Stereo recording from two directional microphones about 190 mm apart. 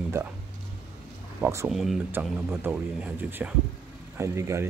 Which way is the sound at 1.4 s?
15° right (ahead or behind).